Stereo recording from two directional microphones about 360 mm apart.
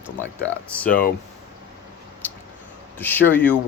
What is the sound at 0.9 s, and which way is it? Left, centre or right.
Speech, left.